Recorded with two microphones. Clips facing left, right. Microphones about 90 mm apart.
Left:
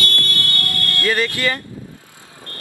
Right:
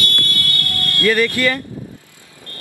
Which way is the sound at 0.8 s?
20° right (ahead or behind).